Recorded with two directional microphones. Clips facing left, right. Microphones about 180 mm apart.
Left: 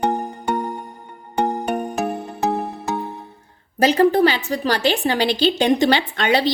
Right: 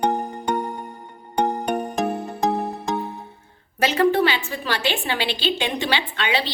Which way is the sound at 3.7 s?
35° left (ahead or behind).